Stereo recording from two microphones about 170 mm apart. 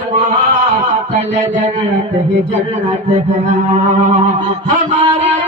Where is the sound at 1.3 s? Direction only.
45° right (ahead or behind).